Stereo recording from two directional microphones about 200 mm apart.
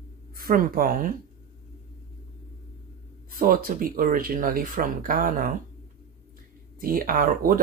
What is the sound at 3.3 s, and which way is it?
Speech, 45° right (ahead or behind).